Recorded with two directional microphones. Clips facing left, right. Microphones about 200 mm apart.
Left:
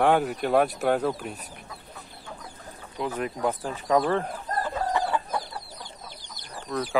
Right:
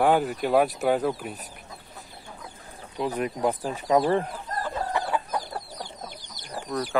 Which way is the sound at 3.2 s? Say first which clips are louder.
Right 2 dB; 20° right (ahead or behind).